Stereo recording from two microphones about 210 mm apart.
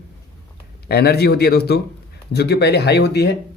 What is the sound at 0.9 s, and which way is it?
Speech, 50° left (ahead or behind).